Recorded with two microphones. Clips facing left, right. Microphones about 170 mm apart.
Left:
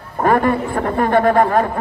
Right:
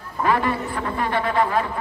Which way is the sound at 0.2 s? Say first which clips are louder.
Left 6 dB; 50° left (ahead or behind).